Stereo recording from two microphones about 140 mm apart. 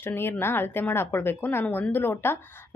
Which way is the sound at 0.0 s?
15° left (ahead or behind).